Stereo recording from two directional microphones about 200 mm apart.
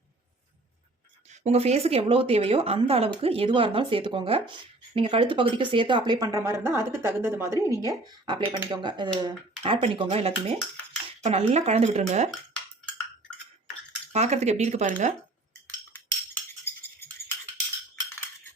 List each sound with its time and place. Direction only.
1.3 s speech: 30° right (ahead or behind)
14.1 s speech: 35° right (ahead or behind)
15.9 s a sound: 10° left (ahead or behind)